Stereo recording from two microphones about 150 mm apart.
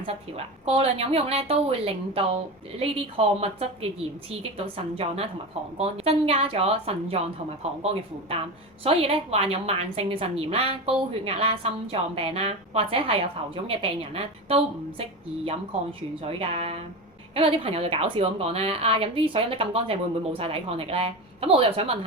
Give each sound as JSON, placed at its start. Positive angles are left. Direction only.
{"t": 0.0, "sound": "a woman's voice", "side_deg": -40}
{"t": 8.8, "sound": "a woman's voice", "side_deg": -40}
{"t": 16.2, "sound": "a woman's voice", "side_deg": -40}